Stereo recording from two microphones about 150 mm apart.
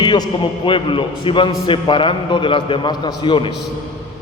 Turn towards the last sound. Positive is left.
turn(degrees=35)  # may be behind; listen again after turning